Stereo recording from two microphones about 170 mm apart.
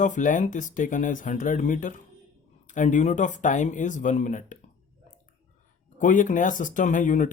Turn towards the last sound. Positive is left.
turn(degrees=50)  # may be behind; listen again after turning